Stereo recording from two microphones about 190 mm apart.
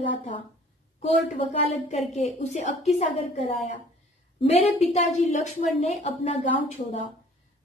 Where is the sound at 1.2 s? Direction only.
35° left (ahead or behind).